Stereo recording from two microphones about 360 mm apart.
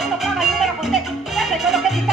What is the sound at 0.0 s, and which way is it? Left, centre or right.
Music, centre.